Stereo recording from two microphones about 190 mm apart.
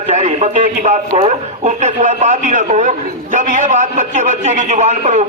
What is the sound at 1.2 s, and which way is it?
A man's voice, 35° right (ahead or behind).